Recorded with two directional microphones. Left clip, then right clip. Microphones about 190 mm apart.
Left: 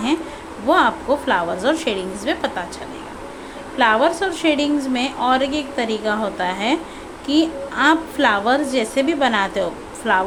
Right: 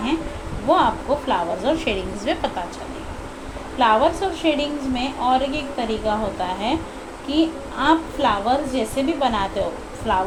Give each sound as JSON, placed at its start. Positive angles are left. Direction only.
{"t": 0.7, "sound": "a woman's voice", "side_deg": 25}
{"t": 3.8, "sound": "a woman's voice", "side_deg": 20}